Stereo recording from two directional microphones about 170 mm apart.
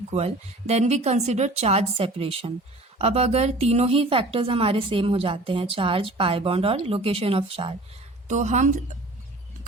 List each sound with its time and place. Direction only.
0.1 s a woman's voice: 40° right (ahead or behind)
8.3 s a woman's voice: 45° right (ahead or behind)